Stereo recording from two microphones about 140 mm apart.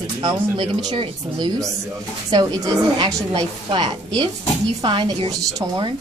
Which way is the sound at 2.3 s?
30° right (ahead or behind).